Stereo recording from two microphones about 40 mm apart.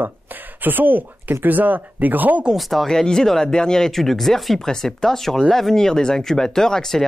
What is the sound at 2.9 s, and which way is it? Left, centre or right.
Speech, centre.